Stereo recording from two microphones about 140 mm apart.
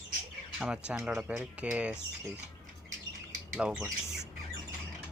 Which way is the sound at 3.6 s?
5° right (ahead or behind).